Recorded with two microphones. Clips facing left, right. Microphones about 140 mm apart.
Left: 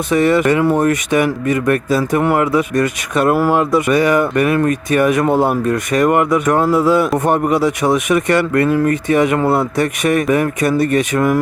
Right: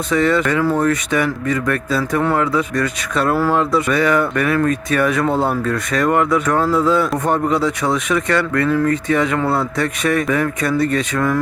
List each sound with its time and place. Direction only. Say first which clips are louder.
0.1 s speech: left 3 dB; 20° left (ahead or behind)
3.3 s speech: left 2 dB; 10° left (ahead or behind)